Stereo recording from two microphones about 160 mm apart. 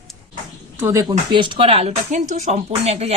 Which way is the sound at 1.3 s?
30° right (ahead or behind).